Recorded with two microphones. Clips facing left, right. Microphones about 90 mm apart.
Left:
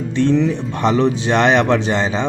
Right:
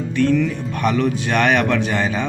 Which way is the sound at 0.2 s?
25° left (ahead or behind).